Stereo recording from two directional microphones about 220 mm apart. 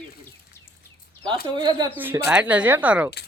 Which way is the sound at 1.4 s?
20° right (ahead or behind).